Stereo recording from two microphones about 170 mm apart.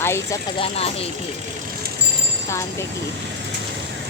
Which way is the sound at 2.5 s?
15° left (ahead or behind).